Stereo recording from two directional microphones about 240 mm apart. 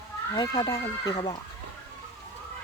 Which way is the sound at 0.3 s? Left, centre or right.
Centre.